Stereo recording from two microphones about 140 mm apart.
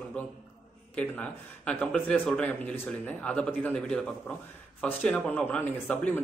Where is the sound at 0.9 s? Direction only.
10° left (ahead or behind).